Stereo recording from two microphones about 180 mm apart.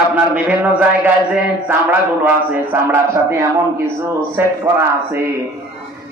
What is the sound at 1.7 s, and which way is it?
A man's voice, 10° right (ahead or behind).